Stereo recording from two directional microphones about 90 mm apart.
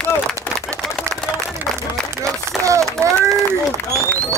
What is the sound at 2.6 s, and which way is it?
Run, 35° right (ahead or behind).